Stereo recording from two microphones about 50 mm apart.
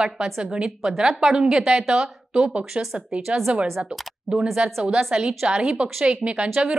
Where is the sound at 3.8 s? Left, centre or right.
Right.